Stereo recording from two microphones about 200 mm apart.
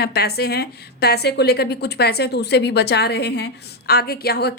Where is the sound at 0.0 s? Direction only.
55° left (ahead or behind).